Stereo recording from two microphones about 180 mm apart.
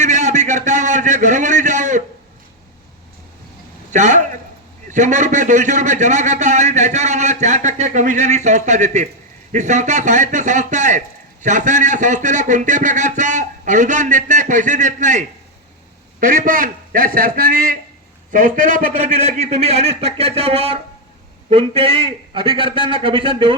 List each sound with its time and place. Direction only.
0.0 s a sound: 40° right (ahead or behind)
3.9 s a man's voice: 40° right (ahead or behind)
16.2 s a man's voice: 50° right (ahead or behind); by 23.6 s 30° right (ahead or behind)